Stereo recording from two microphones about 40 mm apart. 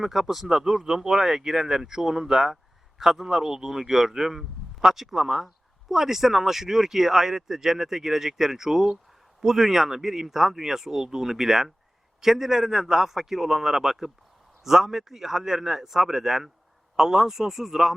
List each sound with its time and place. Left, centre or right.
0.0 s speech: centre